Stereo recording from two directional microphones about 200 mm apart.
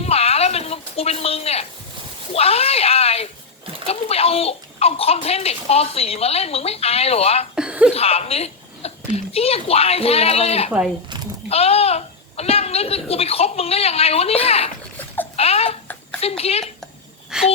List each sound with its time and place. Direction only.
0.0 s a sound: 30° left (ahead or behind)
2.3 s a child's voice: 30° left (ahead or behind)
7.5 s speech: 5° right (ahead or behind)
7.9 s a child's voice: 30° left (ahead or behind)
10.7 s speech: 5° right (ahead or behind)
11.4 s a child's voice: 30° left (ahead or behind)
17.3 s speech: 5° right (ahead or behind)